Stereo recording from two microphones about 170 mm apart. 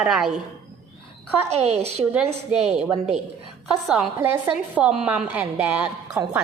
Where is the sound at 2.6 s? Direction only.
5° right (ahead or behind).